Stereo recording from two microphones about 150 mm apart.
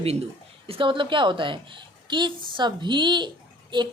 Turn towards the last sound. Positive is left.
turn(degrees=-30)  # may be behind; listen again after turning